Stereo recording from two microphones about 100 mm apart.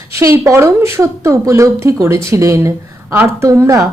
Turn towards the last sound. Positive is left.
turn(degrees=-30)  # may be behind; listen again after turning